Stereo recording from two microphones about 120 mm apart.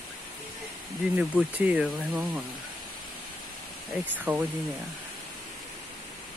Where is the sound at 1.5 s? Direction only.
10° right (ahead or behind).